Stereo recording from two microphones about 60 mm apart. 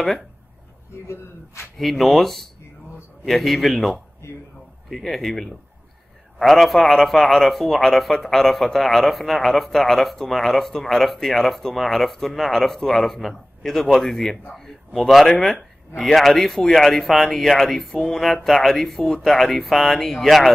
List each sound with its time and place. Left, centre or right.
1.0 s speech: left
1.8 s a man's voice: centre